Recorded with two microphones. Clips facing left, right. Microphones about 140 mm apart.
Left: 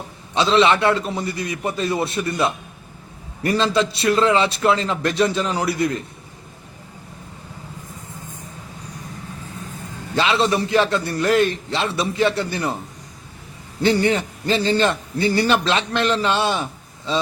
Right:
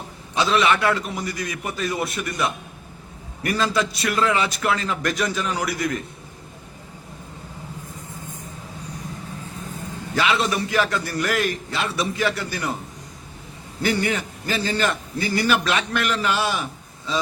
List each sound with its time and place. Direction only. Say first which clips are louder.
0.3 s a man's voice: left 4 dB; 25° left (ahead or behind)
10.2 s a man's voice: left 3 dB; 30° left (ahead or behind)
13.8 s a man's voice: left 5 dB; 30° left (ahead or behind)